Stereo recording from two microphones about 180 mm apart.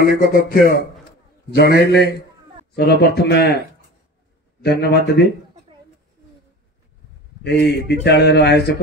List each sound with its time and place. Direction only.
0.0 s a man's voice: 50° left (ahead or behind)
4.6 s speech: 65° left (ahead or behind)
7.4 s speech: 65° left (ahead or behind)